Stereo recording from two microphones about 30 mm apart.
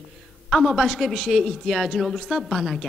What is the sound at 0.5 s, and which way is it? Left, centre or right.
A woman's voice, centre.